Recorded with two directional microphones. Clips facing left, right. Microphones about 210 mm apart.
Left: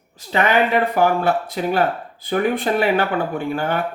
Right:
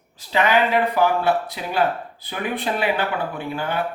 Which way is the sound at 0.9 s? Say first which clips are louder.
Left 2 dB; 50° left (ahead or behind).